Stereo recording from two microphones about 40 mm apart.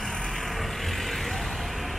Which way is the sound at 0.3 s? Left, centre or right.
Centre.